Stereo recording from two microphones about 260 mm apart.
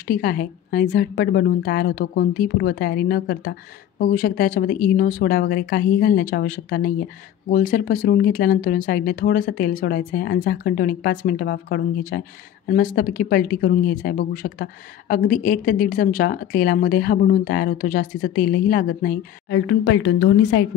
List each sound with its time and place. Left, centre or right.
0.0 s speech: left
19.6 s a woman's voice: left